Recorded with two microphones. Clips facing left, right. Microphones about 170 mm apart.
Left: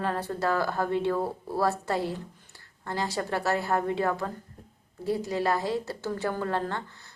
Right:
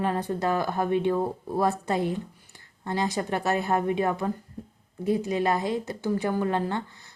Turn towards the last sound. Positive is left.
turn(degrees=-20)  # may be behind; listen again after turning